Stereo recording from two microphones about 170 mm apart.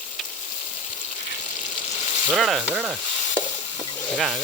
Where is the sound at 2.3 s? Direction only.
Centre (ahead or behind).